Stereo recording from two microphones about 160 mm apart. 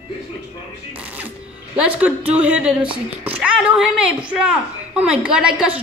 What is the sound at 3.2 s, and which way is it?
A woman's voice, 10° right (ahead or behind).